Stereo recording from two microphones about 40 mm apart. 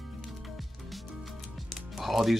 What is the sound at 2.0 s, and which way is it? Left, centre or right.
Speech, centre.